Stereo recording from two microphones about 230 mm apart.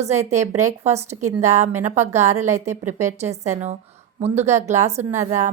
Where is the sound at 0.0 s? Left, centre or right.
Right.